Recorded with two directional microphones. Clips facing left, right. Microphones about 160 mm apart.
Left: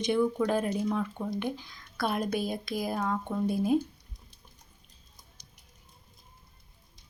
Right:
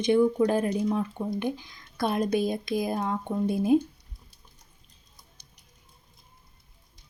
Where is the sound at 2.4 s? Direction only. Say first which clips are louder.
Right 4 dB; 20° right (ahead or behind).